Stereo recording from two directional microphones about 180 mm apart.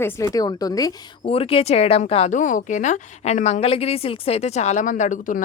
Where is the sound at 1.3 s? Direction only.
30° left (ahead or behind).